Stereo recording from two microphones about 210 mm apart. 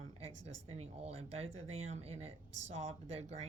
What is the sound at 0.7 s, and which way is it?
Speech, 30° right (ahead or behind).